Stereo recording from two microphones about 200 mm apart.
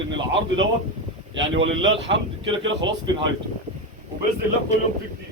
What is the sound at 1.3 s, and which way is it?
Speech, 70° right (ahead or behind).